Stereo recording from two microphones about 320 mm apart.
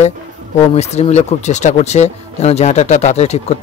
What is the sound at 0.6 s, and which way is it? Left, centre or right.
Speech, centre.